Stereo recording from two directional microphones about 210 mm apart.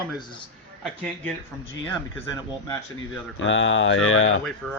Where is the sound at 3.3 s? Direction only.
65° left (ahead or behind).